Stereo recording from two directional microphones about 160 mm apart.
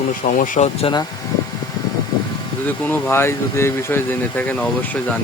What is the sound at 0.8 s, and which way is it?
Speech, 30° left (ahead or behind).